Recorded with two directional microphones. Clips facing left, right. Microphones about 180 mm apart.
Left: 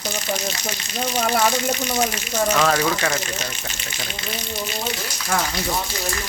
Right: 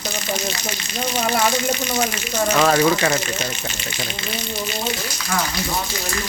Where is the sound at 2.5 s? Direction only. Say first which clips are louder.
Right 4 dB; 5° right (ahead or behind).